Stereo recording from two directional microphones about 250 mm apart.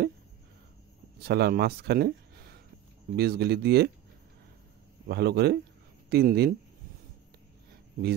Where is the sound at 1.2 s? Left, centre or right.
Right.